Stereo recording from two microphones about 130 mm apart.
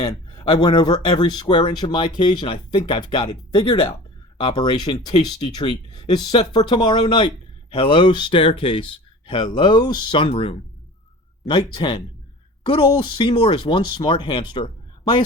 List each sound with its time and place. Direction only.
0.0 s a man's voice: 35° left (ahead or behind)